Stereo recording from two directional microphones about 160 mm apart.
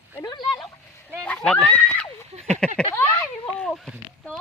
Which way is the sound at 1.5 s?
5° left (ahead or behind).